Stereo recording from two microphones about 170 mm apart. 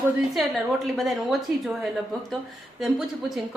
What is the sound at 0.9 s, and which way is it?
A woman's voice, centre (ahead or behind).